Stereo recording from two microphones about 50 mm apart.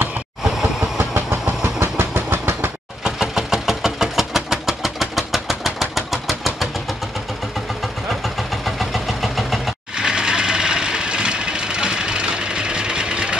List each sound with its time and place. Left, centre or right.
0.4 s train: centre
1.6 s vehicle: right
2.3 s train: right
3.0 s vehicle: centre
8.1 s vehicle: centre
9.9 s sewing machine: centre